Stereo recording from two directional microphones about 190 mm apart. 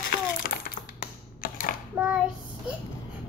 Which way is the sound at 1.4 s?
50° left (ahead or behind).